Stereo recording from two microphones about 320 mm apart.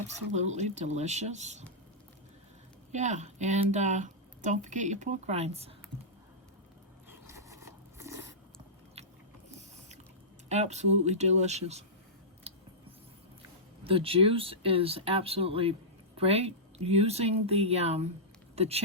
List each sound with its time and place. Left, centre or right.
0.3 s speech: right
2.9 s speech: right
7.1 s a sound: centre
9.0 s biting: centre
10.5 s speech: right
13.8 s speech: centre